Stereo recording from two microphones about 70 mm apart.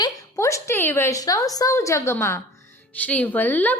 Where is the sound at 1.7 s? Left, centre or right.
Left.